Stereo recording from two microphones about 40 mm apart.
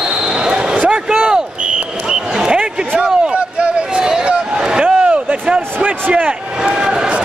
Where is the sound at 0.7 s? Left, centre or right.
Right.